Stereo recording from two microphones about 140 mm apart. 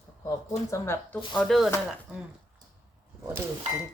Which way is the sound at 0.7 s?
20° left (ahead or behind).